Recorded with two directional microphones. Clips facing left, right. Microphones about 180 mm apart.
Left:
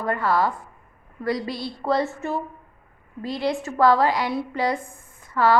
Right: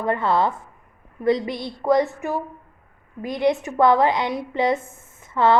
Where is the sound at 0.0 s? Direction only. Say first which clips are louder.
Right 2 dB; 20° right (ahead or behind).